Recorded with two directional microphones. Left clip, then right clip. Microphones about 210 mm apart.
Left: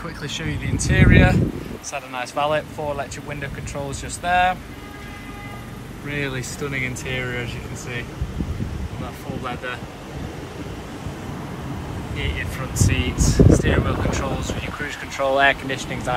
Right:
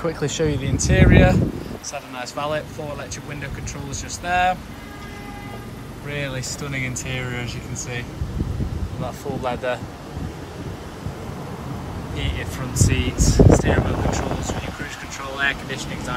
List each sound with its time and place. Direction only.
0.0 s speech: 25° right (ahead or behind); by 3.1 s centre (ahead or behind)
4.2 s speech: 5° right (ahead or behind)
6.0 s speech: 15° right (ahead or behind)
12.2 s speech: 20° right (ahead or behind)
12.8 s speech: centre (ahead or behind); by 15.9 s 20° left (ahead or behind)